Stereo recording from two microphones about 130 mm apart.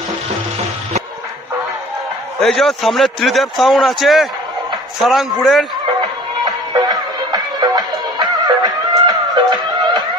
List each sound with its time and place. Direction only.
2.4 s a man's voice: centre (ahead or behind)
6.4 s music: 30° right (ahead or behind)